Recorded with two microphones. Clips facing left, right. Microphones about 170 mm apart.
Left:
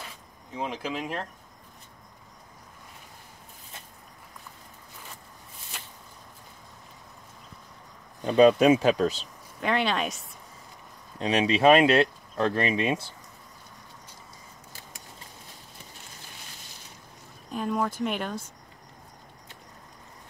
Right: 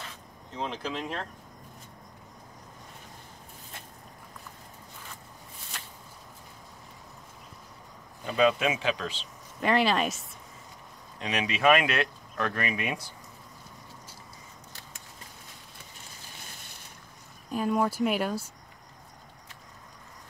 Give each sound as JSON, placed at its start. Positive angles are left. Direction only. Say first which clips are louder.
{"t": 0.5, "sound": "speech", "louder": "left 2 dB", "side_deg": 10}
{"t": 8.2, "sound": "speech", "louder": "left 7 dB", "side_deg": 40}
{"t": 9.6, "sound": "speech", "louder": "right 2 dB", "side_deg": 0}
{"t": 11.1, "sound": "speech", "louder": "left 7 dB", "side_deg": 30}
{"t": 17.5, "sound": "speech", "louder": "right 2 dB", "side_deg": -5}